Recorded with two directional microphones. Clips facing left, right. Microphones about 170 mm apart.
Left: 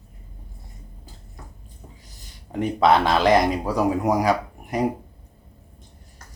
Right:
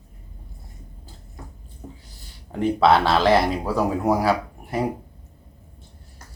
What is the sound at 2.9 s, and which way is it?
Speech, 15° left (ahead or behind).